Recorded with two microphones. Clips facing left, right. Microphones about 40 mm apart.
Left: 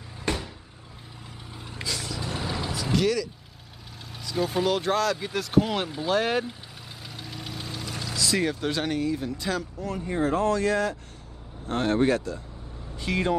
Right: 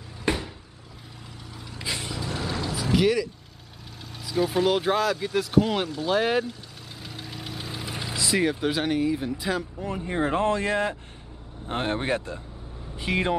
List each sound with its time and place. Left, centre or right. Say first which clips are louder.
0.2 s cupboard open or close: right 3 dB; centre
1.5 s vehicle: left 2 dB; left
1.9 s vehicle: right 1 dB; right
2.1 s vehicle: right 1 dB; centre
2.7 s a sound: right 3 dB; centre
4.2 s speech: right 2 dB; centre
5.1 s speech: right 1 dB; centre
7.1 s engine: right 1 dB; centre
7.8 s speech: even; right